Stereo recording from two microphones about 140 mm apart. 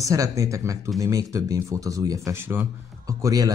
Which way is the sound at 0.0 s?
25° right (ahead or behind).